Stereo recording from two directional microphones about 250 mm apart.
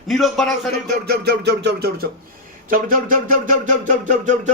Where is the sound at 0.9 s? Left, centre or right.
Right.